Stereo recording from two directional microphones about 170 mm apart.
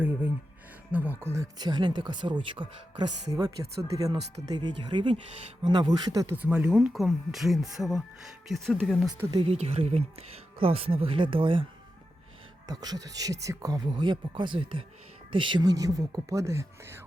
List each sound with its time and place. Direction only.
0.9 s speech: 10° right (ahead or behind)
6.3 s speech: 10° right (ahead or behind)
9.0 s speech: 25° right (ahead or behind)
9.5 s speech: 35° right (ahead or behind)
12.6 s speech: 20° right (ahead or behind)